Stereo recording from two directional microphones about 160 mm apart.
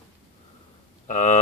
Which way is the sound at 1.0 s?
50° left (ahead or behind).